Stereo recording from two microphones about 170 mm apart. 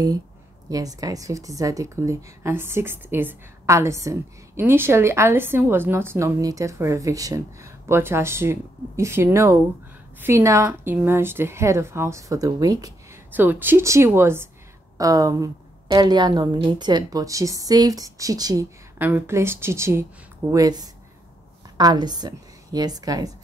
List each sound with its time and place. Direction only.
0.7 s a woman's voice: 20° right (ahead or behind)
18.9 s a woman's voice: 10° right (ahead or behind)